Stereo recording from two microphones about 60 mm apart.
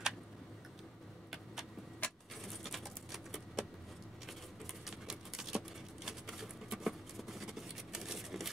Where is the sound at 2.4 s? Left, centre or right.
Centre.